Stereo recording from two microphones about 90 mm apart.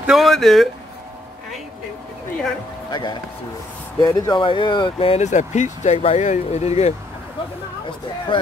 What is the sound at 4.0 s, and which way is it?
Speech, 40° left (ahead or behind).